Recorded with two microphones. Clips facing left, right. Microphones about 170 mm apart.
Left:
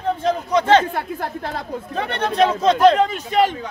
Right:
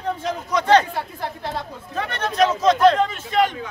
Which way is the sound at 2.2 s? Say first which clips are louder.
Left 2 dB; 30° left (ahead or behind).